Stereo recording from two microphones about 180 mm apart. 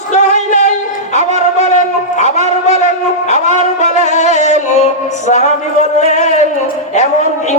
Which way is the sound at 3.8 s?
40° left (ahead or behind).